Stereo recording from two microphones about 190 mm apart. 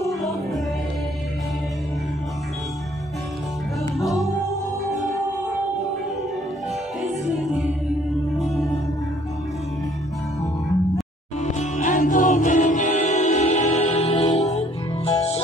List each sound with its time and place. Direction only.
0.2 s music: centre (ahead or behind)
4.0 s music: centre (ahead or behind)
7.0 s music: centre (ahead or behind)
11.7 s music: 40° left (ahead or behind)